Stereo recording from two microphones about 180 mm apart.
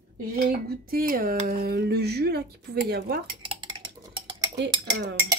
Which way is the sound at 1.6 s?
60° right (ahead or behind).